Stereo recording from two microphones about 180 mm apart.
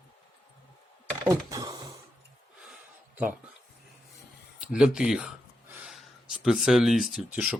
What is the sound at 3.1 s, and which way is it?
Speech, 10° right (ahead or behind).